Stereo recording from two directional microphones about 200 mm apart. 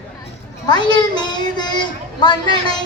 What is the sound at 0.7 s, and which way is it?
A woman's voice, 20° left (ahead or behind).